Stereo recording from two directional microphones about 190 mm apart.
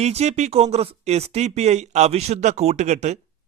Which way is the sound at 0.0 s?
35° right (ahead or behind).